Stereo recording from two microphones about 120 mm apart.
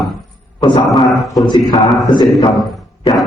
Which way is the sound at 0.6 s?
40° left (ahead or behind).